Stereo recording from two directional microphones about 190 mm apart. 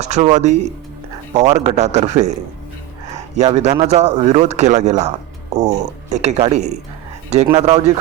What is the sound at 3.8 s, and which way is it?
A man's voice, 35° right (ahead or behind).